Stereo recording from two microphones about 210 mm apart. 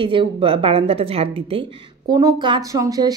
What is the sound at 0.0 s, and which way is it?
A woman's voice, 25° right (ahead or behind).